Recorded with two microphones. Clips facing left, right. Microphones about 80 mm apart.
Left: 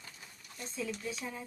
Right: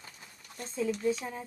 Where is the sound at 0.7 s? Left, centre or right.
Right.